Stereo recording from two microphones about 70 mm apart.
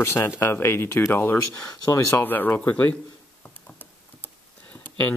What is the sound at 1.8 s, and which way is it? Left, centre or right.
Speech, left.